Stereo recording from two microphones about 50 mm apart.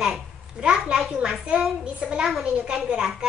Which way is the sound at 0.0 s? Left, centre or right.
Centre.